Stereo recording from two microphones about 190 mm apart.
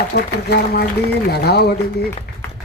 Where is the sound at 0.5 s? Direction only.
55° left (ahead or behind).